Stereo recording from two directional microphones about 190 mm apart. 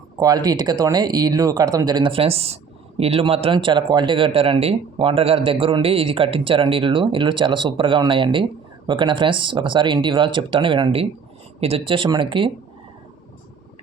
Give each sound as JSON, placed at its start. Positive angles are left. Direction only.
{"t": 0.2, "sound": "a man's voice", "side_deg": -20}